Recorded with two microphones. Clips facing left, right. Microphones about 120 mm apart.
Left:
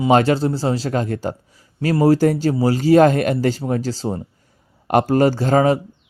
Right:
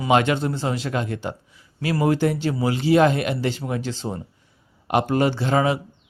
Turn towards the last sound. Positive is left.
turn(degrees=40)  # may be behind; listen again after turning